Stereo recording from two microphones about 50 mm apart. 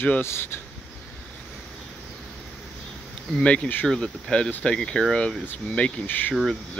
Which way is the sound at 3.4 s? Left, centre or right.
Left.